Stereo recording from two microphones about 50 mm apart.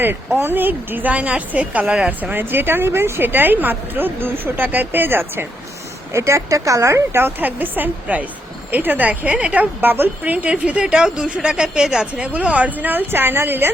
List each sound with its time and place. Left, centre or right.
0.3 s a woman's voice: right
1.1 s a woman's voice: right
2.3 s speech: right
6.1 s a woman's voice: right
7.1 s a woman's voice: right
10.7 s a woman's voice: right
12.3 s a woman's voice: right
13.1 s speech: right